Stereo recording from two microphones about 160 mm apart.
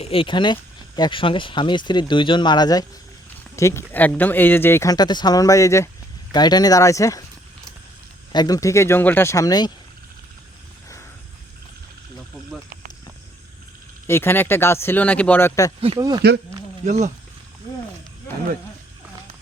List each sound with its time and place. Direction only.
0.0 s speech: 35° left (ahead or behind)
8.3 s speech: 25° left (ahead or behind)
14.1 s speech: 15° left (ahead or behind)
16.0 s speech: 25° right (ahead or behind)
16.8 s speech: 45° right (ahead or behind)